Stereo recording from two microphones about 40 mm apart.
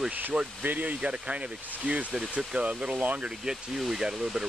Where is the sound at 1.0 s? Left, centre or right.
Right.